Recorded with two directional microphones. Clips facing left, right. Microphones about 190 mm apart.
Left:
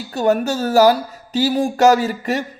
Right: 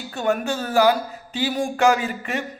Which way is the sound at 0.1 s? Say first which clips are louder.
Left 6 dB; 40° left (ahead or behind).